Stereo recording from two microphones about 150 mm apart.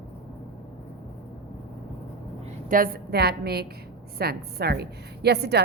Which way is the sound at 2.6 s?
70° right (ahead or behind).